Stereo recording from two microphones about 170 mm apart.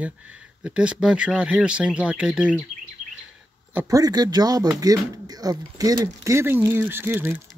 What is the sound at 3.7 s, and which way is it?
Speech, 20° right (ahead or behind).